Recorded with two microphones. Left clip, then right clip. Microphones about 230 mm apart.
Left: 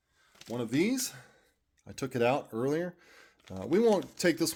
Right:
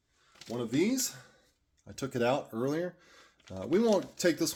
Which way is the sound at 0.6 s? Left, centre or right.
Left.